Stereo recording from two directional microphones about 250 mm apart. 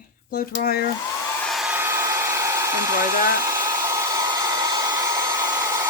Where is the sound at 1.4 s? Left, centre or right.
Centre.